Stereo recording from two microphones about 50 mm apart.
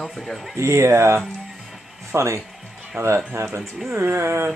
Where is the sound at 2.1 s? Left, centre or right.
Right.